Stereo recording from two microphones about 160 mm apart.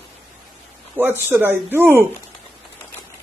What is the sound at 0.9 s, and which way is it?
Speech, 15° right (ahead or behind).